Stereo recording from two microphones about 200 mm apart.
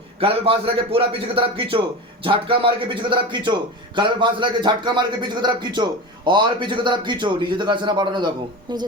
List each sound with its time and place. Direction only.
0.2 s a man's voice: 25° right (ahead or behind)